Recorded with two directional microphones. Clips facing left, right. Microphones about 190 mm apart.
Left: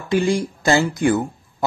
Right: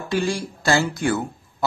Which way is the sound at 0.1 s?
20° left (ahead or behind).